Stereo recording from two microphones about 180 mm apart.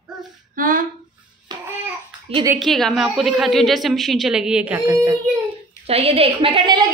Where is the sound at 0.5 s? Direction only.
50° right (ahead or behind).